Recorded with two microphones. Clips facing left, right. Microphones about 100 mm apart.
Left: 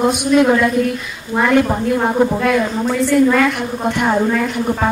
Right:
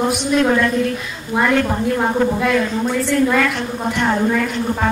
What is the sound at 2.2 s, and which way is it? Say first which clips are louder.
Speech: left 3 dB; 15° left (ahead or behind).